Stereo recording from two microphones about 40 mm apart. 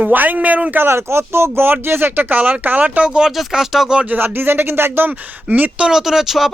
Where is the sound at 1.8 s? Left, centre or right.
Right.